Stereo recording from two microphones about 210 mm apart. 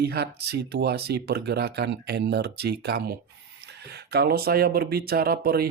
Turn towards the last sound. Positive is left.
turn(degrees=-45)  # may be behind; listen again after turning